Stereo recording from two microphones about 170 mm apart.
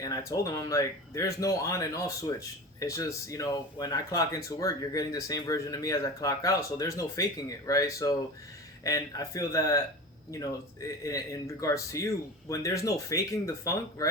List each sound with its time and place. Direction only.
0.0 s speech: 20° left (ahead or behind)